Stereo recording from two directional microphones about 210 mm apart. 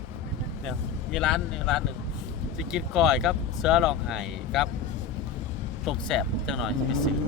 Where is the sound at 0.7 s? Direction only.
Centre (ahead or behind).